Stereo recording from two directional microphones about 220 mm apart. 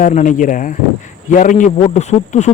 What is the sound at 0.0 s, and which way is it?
A man's voice, 35° left (ahead or behind).